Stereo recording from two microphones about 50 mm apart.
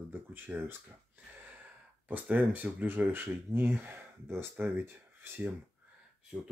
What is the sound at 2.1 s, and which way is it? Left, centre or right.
Speech, right.